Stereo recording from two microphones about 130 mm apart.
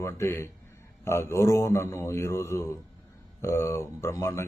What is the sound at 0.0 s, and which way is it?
Speech, 20° left (ahead or behind).